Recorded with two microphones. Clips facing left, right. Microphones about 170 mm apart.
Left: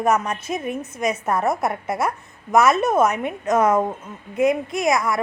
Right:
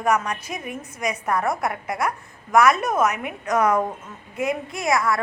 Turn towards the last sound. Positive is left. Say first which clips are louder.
# left 2 dB
turn(degrees=20)  # may be behind; listen again after turning